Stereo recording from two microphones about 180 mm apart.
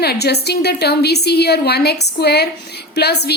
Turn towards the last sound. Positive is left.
turn(degrees=65)  # may be behind; listen again after turning